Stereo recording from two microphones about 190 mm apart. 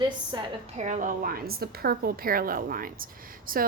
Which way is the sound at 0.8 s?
40° right (ahead or behind).